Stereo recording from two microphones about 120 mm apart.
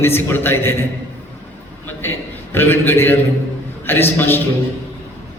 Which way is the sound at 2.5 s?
20° left (ahead or behind).